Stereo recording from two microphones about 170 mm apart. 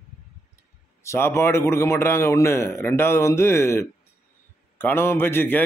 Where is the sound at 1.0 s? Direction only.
15° left (ahead or behind).